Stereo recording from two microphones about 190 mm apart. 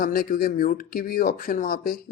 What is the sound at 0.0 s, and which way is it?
Speech, 50° left (ahead or behind).